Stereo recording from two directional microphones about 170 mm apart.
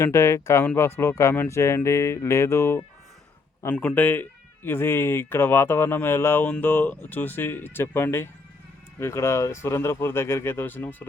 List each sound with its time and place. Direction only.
0.0 s speech: 15° left (ahead or behind)